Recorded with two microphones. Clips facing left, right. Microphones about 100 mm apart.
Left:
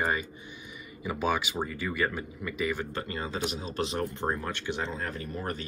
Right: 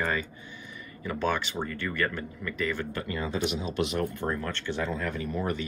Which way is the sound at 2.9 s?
30° left (ahead or behind).